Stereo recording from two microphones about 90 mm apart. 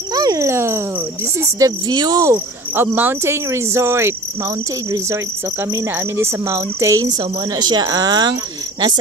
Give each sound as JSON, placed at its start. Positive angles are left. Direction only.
{"t": 0.1, "sound": "cricket", "side_deg": -40}
{"t": 1.4, "sound": "speech", "side_deg": -45}
{"t": 2.7, "sound": "insect", "side_deg": -25}
{"t": 3.4, "sound": "speech", "side_deg": -35}
{"t": 7.1, "sound": "speech", "side_deg": -55}